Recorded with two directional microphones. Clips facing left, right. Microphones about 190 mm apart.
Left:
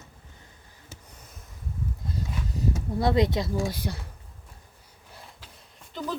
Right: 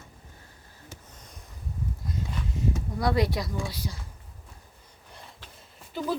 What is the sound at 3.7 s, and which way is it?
Speech, 55° left (ahead or behind).